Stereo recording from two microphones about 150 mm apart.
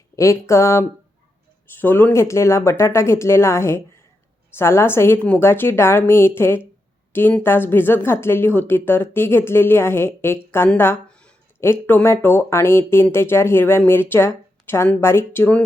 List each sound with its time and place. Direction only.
0.2 s a woman's voice: 20° left (ahead or behind)